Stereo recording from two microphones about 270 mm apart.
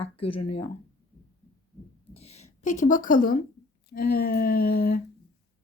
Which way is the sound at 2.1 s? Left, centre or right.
Left.